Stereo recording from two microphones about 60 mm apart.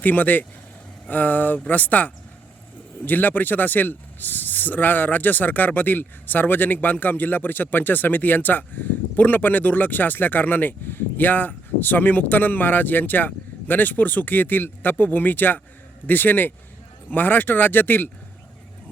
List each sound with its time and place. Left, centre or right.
0.0 s speech: left